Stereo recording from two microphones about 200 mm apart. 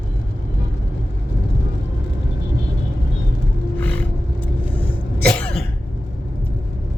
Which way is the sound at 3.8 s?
5° left (ahead or behind).